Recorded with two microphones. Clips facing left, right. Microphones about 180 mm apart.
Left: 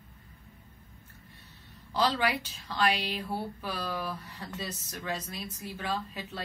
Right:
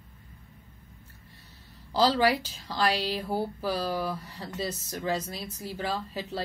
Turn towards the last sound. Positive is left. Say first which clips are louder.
# right 2 dB
turn(degrees=-35)  # may be behind; listen again after turning